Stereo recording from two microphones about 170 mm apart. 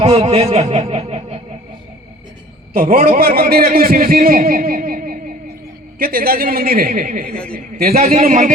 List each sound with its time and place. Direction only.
0.0 s speech: 35° right (ahead or behind)
0.5 s snicker: 40° right (ahead or behind)
2.7 s a man's voice: 55° right (ahead or behind)
7.3 s a man's voice: 5° left (ahead or behind)
7.9 s a man's voice: 40° right (ahead or behind)